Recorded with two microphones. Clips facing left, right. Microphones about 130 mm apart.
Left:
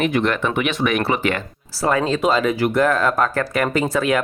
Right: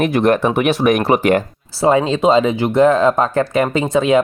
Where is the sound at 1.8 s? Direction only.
20° right (ahead or behind).